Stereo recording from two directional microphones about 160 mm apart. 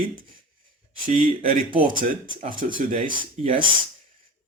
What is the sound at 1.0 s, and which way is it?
Speech, 60° right (ahead or behind).